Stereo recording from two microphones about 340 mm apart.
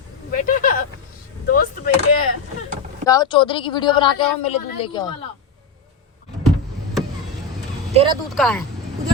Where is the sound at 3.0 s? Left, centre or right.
Centre.